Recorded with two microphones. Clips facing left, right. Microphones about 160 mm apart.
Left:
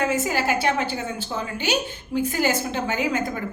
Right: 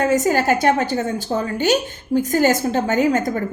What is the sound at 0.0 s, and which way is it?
A woman's voice, 40° right (ahead or behind).